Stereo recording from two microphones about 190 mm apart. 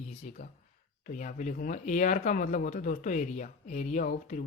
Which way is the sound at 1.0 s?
45° left (ahead or behind).